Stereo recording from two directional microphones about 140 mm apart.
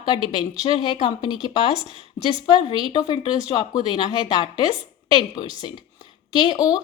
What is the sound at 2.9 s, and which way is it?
A woman's voice, 35° left (ahead or behind).